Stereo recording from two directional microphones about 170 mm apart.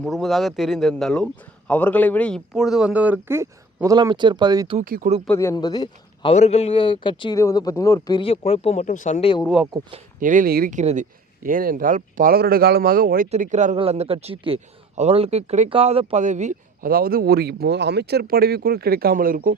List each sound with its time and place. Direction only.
0.0 s a man's voice: centre (ahead or behind); by 4.8 s 25° right (ahead or behind)
4.8 s speech: 50° right (ahead or behind)
5.3 s a man's voice: 15° left (ahead or behind)
6.3 s speech: 40° left (ahead or behind)
10.2 s speech: 50° right (ahead or behind)
13.3 s speech: 45° right (ahead or behind)
13.7 s speech: 35° right (ahead or behind); by 19.5 s 55° right (ahead or behind)